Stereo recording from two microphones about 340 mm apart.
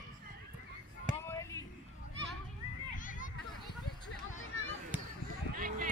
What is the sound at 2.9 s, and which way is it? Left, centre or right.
Hubbub, left.